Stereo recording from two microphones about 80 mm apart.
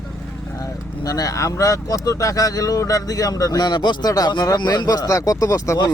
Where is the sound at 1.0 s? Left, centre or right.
Left.